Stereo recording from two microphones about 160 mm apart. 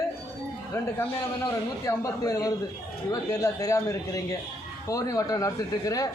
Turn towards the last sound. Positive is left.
turn(degrees=20)  # may be behind; listen again after turning